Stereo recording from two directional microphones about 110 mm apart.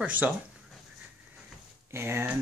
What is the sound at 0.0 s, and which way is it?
Speech, 15° right (ahead or behind).